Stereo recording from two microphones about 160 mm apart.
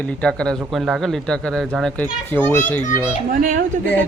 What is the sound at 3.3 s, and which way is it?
Speech, 55° right (ahead or behind).